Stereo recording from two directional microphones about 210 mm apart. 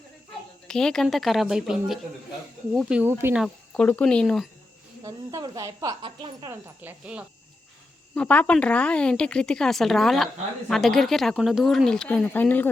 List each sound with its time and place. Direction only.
0.7 s a woman's voice: 5° left (ahead or behind)
3.4 s a woman's voice: 5° left (ahead or behind)
5.0 s a woman's voice: 15° right (ahead or behind)
6.5 s a woman's voice: 5° right (ahead or behind)
8.1 s a woman's voice: 5° left (ahead or behind)